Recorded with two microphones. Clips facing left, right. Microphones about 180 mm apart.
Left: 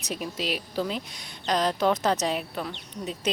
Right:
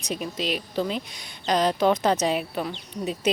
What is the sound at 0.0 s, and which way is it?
A woman's voice, 5° left (ahead or behind).